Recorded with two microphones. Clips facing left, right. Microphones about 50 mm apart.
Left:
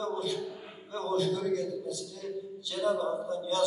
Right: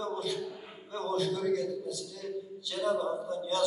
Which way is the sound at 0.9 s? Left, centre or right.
Right.